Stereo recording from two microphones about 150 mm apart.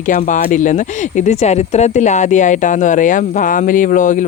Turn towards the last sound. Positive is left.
turn(degrees=60)  # may be behind; listen again after turning